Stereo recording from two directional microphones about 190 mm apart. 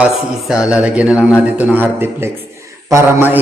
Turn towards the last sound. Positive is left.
turn(degrees=-10)  # may be behind; listen again after turning